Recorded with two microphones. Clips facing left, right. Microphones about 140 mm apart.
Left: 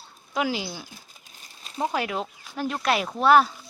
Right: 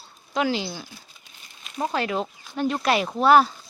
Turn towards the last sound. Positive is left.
turn(degrees=0)  # may be behind; listen again after turning